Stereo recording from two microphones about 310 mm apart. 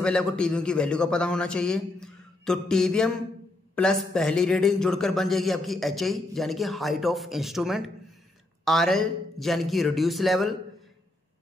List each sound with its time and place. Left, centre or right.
0.0 s a man's voice: centre